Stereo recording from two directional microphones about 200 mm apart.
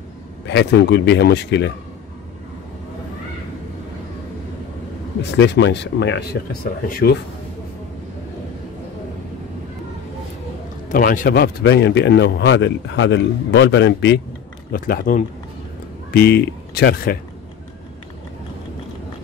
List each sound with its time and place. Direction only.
0.5 s a man's voice: 60° left (ahead or behind)
5.4 s a man's voice: 60° left (ahead or behind)
10.9 s a man's voice: 45° left (ahead or behind); by 14.1 s 65° left (ahead or behind)
14.7 s a man's voice: 45° left (ahead or behind)